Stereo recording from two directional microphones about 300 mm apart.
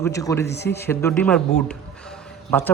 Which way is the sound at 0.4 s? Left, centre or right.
Left.